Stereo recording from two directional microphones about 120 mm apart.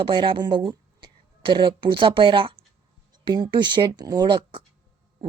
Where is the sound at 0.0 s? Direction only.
45° right (ahead or behind).